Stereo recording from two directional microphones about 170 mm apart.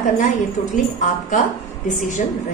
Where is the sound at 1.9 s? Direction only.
50° left (ahead or behind).